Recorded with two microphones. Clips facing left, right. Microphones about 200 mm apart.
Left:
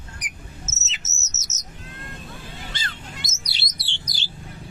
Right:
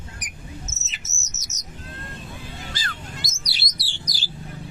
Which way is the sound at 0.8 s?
20° left (ahead or behind).